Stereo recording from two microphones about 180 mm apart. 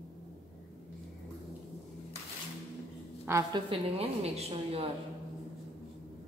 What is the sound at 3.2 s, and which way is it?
Speech, 15° right (ahead or behind).